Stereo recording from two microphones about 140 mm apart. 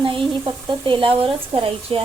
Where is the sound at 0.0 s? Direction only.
40° right (ahead or behind).